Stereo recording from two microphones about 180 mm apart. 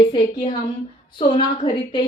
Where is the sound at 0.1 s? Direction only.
30° left (ahead or behind).